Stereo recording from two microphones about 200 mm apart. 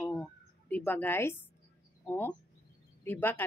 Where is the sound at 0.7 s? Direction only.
10° left (ahead or behind).